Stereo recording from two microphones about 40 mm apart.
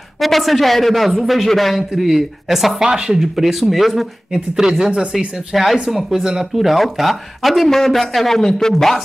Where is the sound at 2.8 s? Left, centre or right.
Right.